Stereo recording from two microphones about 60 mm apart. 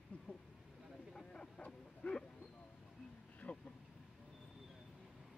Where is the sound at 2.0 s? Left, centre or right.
Left.